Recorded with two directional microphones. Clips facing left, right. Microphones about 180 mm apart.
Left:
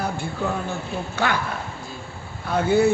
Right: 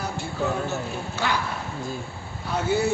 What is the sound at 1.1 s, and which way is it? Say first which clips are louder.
Speech: left 3 dB; 55° left (ahead or behind).